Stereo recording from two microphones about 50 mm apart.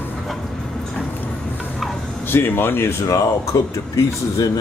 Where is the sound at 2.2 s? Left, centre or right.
Left.